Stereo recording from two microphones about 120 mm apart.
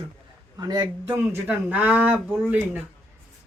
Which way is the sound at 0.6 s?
35° right (ahead or behind).